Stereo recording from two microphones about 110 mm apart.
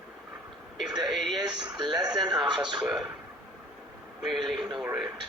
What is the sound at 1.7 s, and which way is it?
Speech, 40° right (ahead or behind).